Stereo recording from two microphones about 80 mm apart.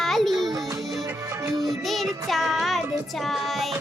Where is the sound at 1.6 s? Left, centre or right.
Centre.